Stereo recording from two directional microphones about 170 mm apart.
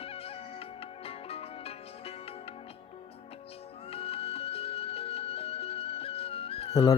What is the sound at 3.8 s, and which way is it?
Music, 35° left (ahead or behind).